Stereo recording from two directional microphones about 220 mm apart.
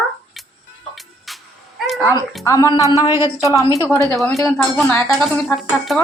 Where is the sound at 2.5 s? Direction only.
15° left (ahead or behind).